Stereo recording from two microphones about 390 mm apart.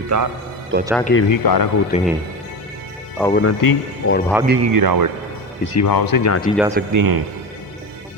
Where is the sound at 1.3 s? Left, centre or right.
Left.